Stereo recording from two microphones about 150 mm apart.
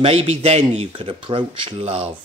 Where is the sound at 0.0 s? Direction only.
40° right (ahead or behind).